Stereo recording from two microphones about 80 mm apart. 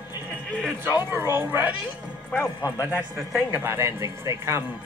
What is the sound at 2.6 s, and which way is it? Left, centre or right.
Speech, left.